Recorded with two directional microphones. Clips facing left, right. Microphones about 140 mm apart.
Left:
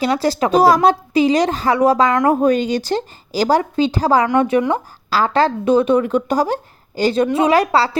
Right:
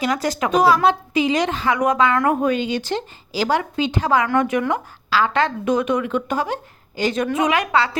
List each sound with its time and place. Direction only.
0.0 s a woman's voice: 30° left (ahead or behind)